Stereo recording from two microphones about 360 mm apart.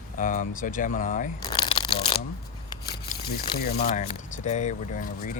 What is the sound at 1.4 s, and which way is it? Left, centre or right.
Shuffling cards, centre.